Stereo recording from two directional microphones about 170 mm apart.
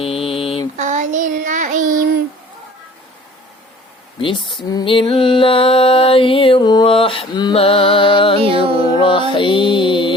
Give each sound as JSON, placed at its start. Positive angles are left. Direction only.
{"t": 0.0, "sound": "mantra", "side_deg": 35}
{"t": 0.8, "sound": "child singing", "side_deg": -45}
{"t": 4.2, "sound": "speech", "side_deg": 30}
{"t": 4.7, "sound": "mantra", "side_deg": 25}
{"t": 8.4, "sound": "music", "side_deg": -35}
{"t": 9.0, "sound": "mantra", "side_deg": 30}